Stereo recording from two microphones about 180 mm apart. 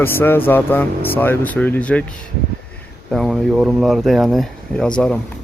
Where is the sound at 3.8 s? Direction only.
Centre (ahead or behind).